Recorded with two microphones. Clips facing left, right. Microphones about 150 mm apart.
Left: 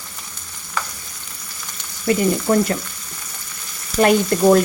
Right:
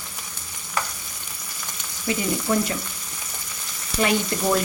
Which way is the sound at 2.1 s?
50° left (ahead or behind).